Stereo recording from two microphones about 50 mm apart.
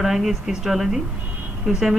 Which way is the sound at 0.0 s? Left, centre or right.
Centre.